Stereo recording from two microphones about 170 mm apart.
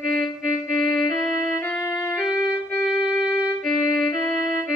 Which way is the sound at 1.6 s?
15° left (ahead or behind).